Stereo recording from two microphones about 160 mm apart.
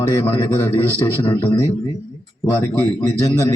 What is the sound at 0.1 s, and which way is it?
A man's voice, 15° left (ahead or behind).